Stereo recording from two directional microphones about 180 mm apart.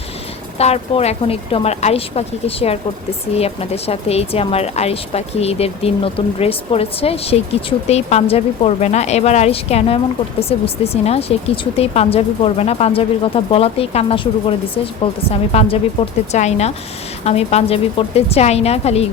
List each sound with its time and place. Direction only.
0.6 s speech: 35° left (ahead or behind)